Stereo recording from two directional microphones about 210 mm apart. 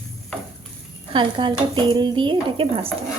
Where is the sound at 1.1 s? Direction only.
25° right (ahead or behind).